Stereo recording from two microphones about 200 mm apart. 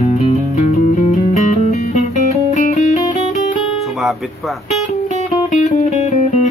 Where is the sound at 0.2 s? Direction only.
30° left (ahead or behind).